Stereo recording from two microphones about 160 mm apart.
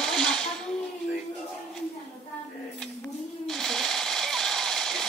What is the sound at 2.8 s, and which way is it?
Sewing machine, 5° left (ahead or behind).